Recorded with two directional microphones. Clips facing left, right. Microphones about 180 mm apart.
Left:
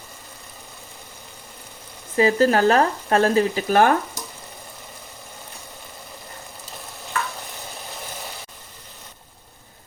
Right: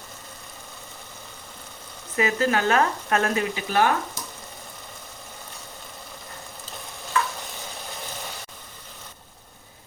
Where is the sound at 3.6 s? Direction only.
50° left (ahead or behind).